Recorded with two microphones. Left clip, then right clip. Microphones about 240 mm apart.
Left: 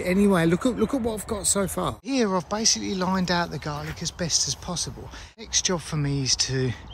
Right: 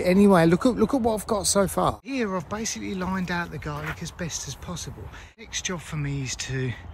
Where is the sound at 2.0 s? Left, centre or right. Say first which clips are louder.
Left 4 dB; centre.